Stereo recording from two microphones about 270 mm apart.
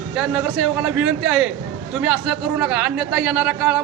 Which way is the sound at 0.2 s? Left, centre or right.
Centre.